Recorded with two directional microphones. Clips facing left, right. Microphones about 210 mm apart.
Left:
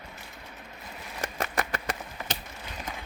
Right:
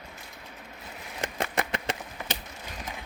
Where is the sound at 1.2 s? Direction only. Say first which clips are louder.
Right 1 dB; 20° right (ahead or behind).